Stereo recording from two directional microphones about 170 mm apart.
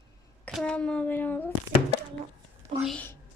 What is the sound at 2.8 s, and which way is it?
Speech, 5° left (ahead or behind).